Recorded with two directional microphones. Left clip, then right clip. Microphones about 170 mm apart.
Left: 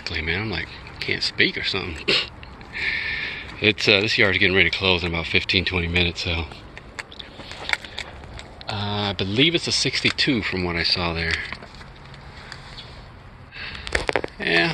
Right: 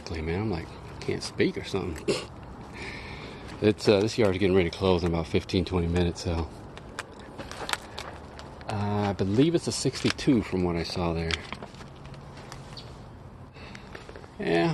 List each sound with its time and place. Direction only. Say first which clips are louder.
0.0 s speech: left 7 dB; 15° right (ahead or behind)
8.7 s speech: left 4 dB; 15° right (ahead or behind)
14.3 s a sound: left 4 dB; 15° right (ahead or behind)